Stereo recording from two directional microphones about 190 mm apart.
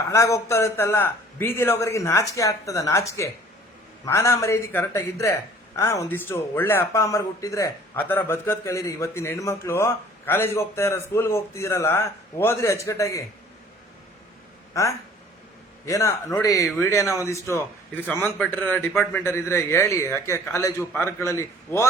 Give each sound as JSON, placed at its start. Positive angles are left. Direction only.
{"t": 0.1, "sound": "a man's voice", "side_deg": 15}
{"t": 14.7, "sound": "a man's voice", "side_deg": 15}